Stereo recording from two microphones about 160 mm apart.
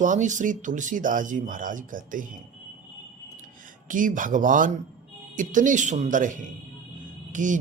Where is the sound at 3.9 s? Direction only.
55° right (ahead or behind).